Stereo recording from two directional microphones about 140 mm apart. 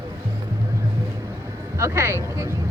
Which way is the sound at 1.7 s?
20° right (ahead or behind).